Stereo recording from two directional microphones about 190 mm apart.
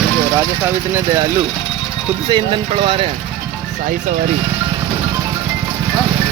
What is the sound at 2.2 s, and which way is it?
Speech, 25° right (ahead or behind).